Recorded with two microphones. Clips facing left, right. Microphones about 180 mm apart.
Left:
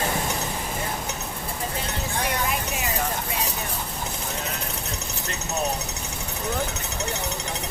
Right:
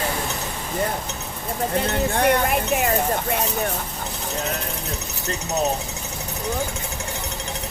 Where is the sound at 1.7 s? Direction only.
60° right (ahead or behind).